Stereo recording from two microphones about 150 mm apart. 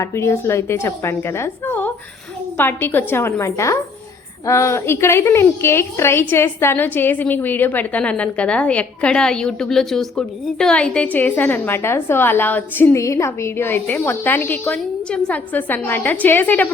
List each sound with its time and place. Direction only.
0.0 s a woman's voice: 15° left (ahead or behind)